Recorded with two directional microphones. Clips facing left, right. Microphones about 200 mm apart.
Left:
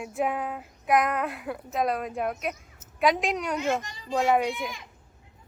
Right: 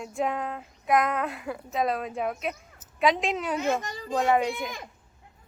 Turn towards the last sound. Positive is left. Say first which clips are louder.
# even
turn(degrees=0)  # may be behind; listen again after turning